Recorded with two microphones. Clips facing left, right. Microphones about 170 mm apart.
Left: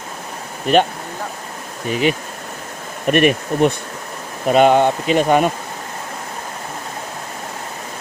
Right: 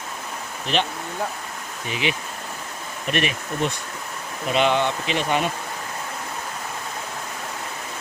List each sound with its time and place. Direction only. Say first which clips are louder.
0.7 s speech: left 10 dB; 50° left (ahead or behind)
1.9 s speech: left 8 dB; 45° left (ahead or behind)